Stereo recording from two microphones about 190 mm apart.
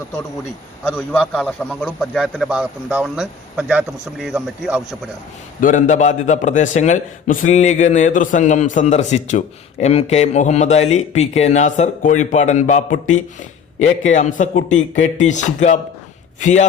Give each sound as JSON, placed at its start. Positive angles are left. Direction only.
{"t": 0.9, "sound": "a man's voice", "side_deg": 10}
{"t": 5.5, "sound": "a man's voice", "side_deg": 45}
{"t": 14.1, "sound": "a man's voice", "side_deg": 40}